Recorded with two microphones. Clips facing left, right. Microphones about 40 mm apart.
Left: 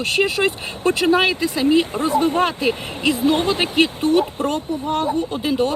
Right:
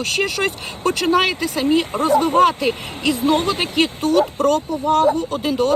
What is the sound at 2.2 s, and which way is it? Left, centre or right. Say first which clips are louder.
Speech: right 3 dB; left.